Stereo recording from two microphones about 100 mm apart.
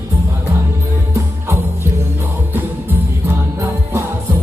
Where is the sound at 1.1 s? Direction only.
30° right (ahead or behind).